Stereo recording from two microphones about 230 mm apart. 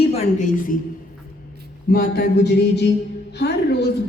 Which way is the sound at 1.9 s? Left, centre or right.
Left.